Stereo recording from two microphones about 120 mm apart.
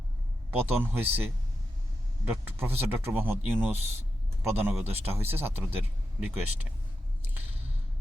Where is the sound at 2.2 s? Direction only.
20° right (ahead or behind).